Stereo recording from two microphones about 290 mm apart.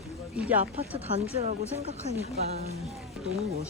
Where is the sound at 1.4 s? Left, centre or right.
Right.